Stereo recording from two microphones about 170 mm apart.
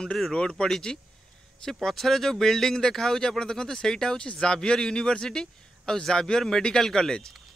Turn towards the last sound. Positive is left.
turn(degrees=5)  # may be behind; listen again after turning